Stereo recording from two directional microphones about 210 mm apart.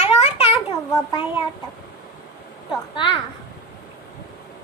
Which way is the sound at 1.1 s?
25° left (ahead or behind).